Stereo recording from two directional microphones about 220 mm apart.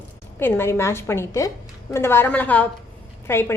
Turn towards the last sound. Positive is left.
turn(degrees=10)  # may be behind; listen again after turning